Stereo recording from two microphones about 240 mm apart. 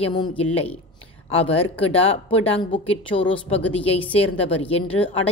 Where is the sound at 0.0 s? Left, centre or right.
Centre.